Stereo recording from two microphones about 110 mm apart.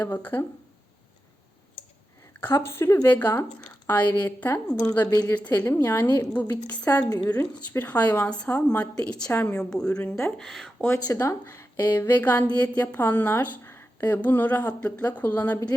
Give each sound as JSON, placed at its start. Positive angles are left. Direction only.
{"t": 0.0, "sound": "a woman's voice", "side_deg": 15}
{"t": 2.6, "sound": "a woman's voice", "side_deg": 25}
{"t": 9.3, "sound": "speech", "side_deg": 20}
{"t": 9.6, "sound": "a woman's voice", "side_deg": 5}
{"t": 10.8, "sound": "a woman's voice", "side_deg": 15}